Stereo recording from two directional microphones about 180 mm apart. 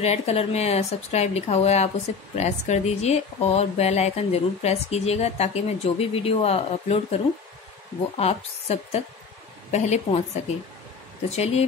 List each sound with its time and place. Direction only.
0.0 s speech: 35° left (ahead or behind)
8.2 s speech: 35° left (ahead or behind)
11.2 s speech: 35° left (ahead or behind)